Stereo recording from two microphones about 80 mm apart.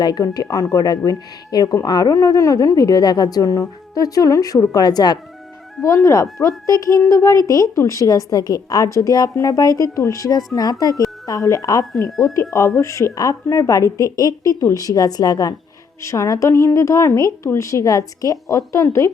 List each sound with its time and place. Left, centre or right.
0.0 s speech: left
0.5 s a woman's voice: left
5.8 s a woman's voice: left
11.3 s a woman's voice: left
16.0 s a woman's voice: left